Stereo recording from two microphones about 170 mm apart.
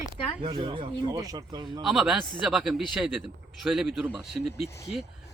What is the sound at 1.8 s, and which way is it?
Speech, centre (ahead or behind).